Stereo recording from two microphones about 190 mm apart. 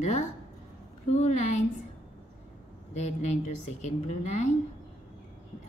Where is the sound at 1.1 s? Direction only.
40° left (ahead or behind).